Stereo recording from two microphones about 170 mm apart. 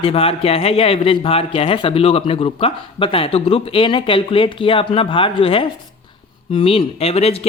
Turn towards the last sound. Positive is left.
turn(degrees=35)  # may be behind; listen again after turning